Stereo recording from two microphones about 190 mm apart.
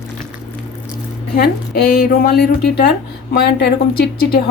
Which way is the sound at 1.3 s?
55° left (ahead or behind).